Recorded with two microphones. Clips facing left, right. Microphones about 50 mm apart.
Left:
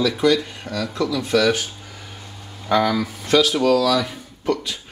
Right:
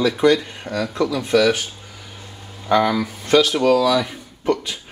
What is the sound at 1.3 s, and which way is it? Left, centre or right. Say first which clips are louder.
Speech: right 2 dB; centre.